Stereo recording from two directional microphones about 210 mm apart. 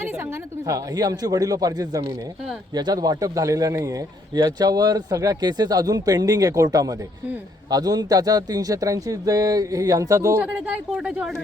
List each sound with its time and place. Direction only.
0.7 s speech: 15° right (ahead or behind)